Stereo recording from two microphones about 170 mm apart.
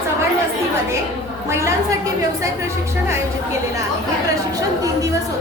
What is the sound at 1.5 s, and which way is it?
Speech, 15° right (ahead or behind).